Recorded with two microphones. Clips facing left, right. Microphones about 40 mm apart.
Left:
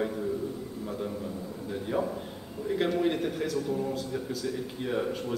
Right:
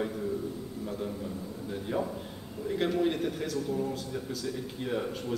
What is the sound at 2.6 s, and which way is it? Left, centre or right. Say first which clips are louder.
A man's voice: left 1 dB; centre.